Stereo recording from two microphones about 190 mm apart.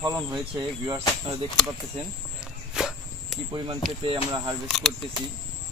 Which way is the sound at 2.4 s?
Centre (ahead or behind).